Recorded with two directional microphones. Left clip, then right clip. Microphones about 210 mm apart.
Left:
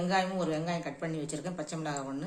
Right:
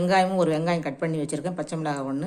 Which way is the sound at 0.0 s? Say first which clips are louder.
Right 9 dB; 35° right (ahead or behind).